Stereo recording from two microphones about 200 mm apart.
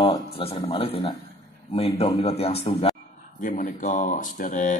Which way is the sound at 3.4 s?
40° left (ahead or behind).